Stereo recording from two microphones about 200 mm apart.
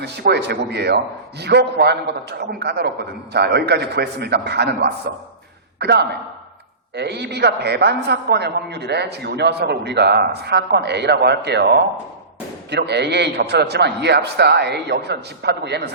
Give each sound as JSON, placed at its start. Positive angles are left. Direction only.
{"t": 0.0, "sound": "a man's voice", "side_deg": -55}